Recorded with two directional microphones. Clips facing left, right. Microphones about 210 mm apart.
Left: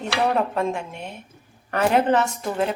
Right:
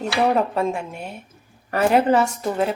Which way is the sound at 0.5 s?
5° right (ahead or behind).